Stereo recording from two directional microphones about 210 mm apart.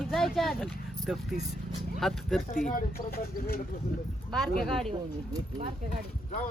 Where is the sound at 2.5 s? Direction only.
40° left (ahead or behind).